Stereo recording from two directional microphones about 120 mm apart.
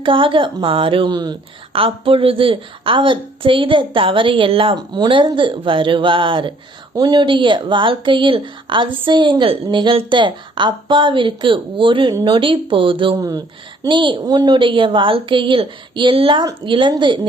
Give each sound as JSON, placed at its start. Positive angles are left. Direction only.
{"t": 0.0, "sound": "a woman's voice", "side_deg": -45}
{"t": 1.8, "sound": "a woman's voice", "side_deg": -50}
{"t": 13.1, "sound": "a woman's voice", "side_deg": -30}
{"t": 13.8, "sound": "a woman's voice", "side_deg": -40}